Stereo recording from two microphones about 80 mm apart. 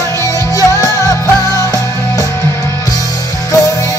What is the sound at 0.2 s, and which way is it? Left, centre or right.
Music, left.